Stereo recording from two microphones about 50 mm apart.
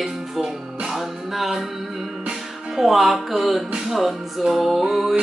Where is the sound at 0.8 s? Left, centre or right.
Centre.